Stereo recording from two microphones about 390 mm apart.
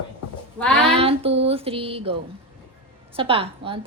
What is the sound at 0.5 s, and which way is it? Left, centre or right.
Speech, centre.